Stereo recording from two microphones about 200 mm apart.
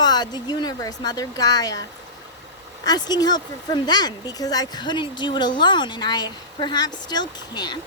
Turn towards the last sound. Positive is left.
turn(degrees=20)  # may be behind; listen again after turning